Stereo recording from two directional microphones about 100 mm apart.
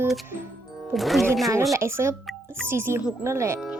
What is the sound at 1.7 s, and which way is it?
Speech, 25° right (ahead or behind).